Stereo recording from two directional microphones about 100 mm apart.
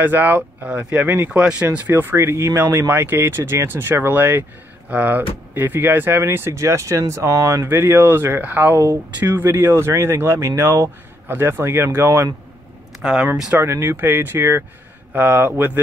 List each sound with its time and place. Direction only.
0.0 s speech: 20° right (ahead or behind)
13.0 s speech: 5° right (ahead or behind)
13.6 s speech: 25° right (ahead or behind)